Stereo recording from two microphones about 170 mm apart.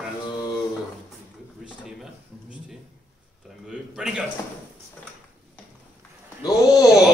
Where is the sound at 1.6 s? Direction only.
Centre (ahead or behind).